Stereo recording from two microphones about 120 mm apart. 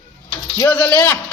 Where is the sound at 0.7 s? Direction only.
15° left (ahead or behind).